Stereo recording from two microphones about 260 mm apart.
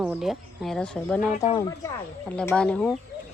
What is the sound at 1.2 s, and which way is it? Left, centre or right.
Speech, left.